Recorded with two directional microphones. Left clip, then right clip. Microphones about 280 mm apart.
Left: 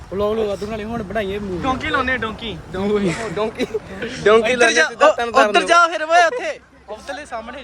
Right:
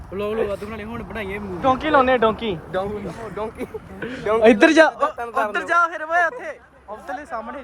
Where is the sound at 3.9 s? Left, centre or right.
Centre.